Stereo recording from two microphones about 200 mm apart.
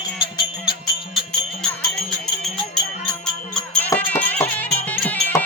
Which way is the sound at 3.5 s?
10° left (ahead or behind).